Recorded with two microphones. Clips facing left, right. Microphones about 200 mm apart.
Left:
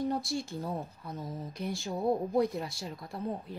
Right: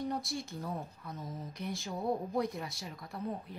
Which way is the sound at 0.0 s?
30° left (ahead or behind).